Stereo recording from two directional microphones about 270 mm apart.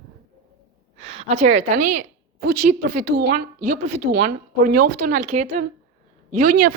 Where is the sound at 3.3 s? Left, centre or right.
Right.